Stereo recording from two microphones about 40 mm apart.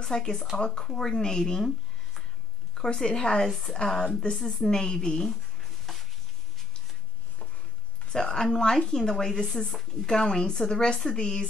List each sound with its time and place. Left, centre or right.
0.0 s speech: centre
2.7 s speech: centre
3.4 s speech: centre
4.6 s speech: centre
5.9 s a sound: centre
8.1 s speech: centre